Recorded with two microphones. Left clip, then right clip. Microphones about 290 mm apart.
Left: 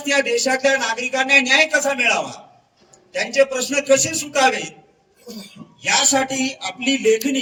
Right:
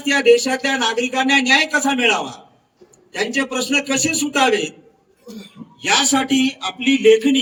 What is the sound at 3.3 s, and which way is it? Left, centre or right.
Speech, right.